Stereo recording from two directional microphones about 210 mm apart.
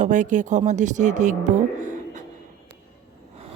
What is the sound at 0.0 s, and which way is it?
Speech, 35° right (ahead or behind).